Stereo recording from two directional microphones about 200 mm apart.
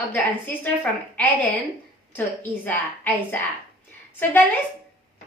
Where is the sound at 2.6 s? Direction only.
10° left (ahead or behind).